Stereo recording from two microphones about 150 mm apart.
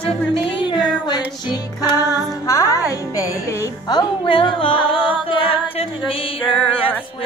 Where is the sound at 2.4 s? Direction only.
20° left (ahead or behind); by 6.3 s 40° left (ahead or behind).